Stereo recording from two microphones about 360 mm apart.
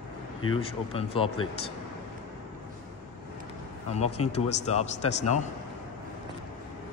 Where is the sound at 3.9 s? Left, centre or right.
Centre.